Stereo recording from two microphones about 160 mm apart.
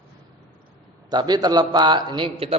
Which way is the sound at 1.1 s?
25° right (ahead or behind).